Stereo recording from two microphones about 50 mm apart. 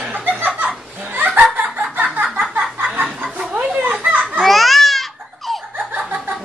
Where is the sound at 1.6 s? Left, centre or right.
Right.